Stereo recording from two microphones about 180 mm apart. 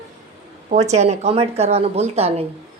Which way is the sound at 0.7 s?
40° right (ahead or behind).